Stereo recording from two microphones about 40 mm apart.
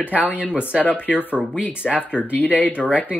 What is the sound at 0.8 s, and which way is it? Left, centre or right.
Speech, left.